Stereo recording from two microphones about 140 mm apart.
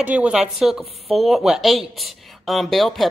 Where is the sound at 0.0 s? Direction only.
10° right (ahead or behind).